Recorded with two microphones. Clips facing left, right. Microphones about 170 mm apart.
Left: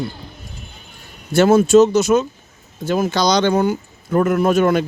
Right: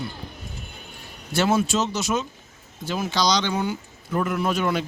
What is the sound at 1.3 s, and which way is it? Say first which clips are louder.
Speech: left 10 dB; 50° left (ahead or behind).